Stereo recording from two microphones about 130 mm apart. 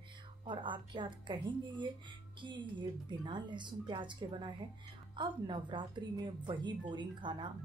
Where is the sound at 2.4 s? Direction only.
35° right (ahead or behind).